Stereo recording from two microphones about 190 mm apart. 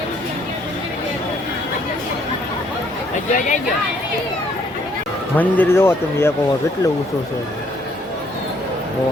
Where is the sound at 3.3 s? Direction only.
40° left (ahead or behind).